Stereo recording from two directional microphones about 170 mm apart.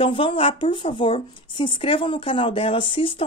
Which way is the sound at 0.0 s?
30° left (ahead or behind).